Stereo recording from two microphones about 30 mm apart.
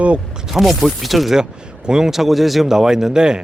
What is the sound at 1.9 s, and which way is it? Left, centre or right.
Speech, centre.